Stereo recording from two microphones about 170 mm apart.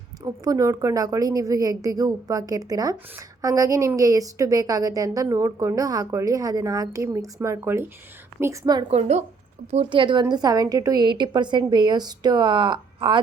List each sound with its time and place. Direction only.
0.2 s a woman's voice: 20° right (ahead or behind)
8.9 s a woman's voice: 40° right (ahead or behind)